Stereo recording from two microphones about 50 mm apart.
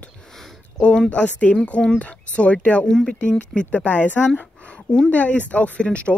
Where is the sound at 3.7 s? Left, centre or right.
Left.